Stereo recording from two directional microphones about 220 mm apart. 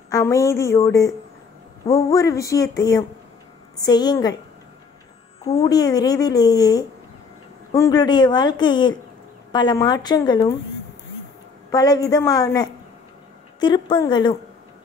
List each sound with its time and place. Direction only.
0.1 s speech: 15° left (ahead or behind)
5.6 s speech: 15° left (ahead or behind)
11.7 s a woman's voice: 15° left (ahead or behind)